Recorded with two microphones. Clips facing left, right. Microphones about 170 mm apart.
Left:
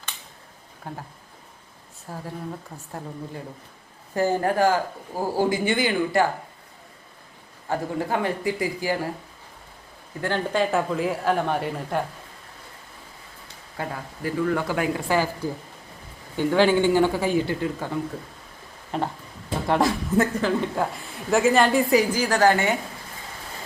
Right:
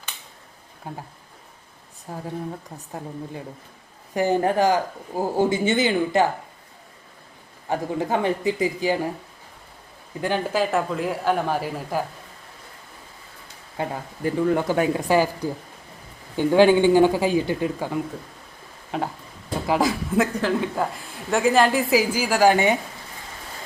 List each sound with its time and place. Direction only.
0.9 s a man's voice: 15° right (ahead or behind)
2.0 s a man's voice: 15° right (ahead or behind)
7.7 s speech: 20° right (ahead or behind)
10.2 s a man's voice: 15° right (ahead or behind)
13.7 s a man's voice: 25° right (ahead or behind)
19.6 s a man's voice: centre (ahead or behind); by 22.8 s 15° right (ahead or behind)